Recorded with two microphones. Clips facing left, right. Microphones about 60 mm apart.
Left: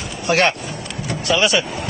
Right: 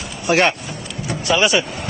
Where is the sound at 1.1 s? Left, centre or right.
Centre.